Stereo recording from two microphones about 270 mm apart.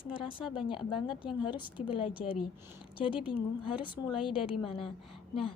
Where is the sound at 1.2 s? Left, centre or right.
Centre.